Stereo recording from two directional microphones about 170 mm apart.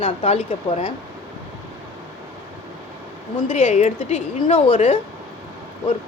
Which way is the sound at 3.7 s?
40° left (ahead or behind).